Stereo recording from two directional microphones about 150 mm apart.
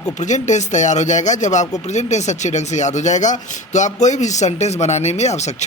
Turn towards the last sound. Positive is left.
turn(degrees=50)  # may be behind; listen again after turning